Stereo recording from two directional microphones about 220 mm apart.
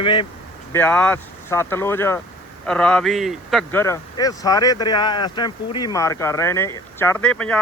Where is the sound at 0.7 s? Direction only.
10° left (ahead or behind).